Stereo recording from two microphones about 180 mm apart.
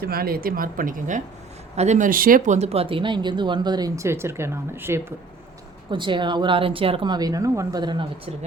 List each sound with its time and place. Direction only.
0.0 s speech: 55° right (ahead or behind); by 4.9 s 15° right (ahead or behind)
5.9 s speech: 25° right (ahead or behind)